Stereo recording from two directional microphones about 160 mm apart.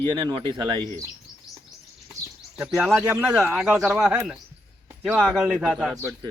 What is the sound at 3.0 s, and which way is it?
Speech, 10° right (ahead or behind).